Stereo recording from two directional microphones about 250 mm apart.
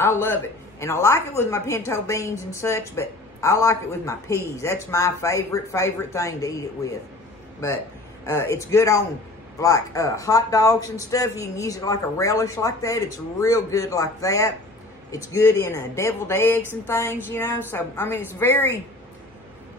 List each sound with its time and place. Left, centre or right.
0.0 s a woman's voice: centre
8.3 s a woman's voice: centre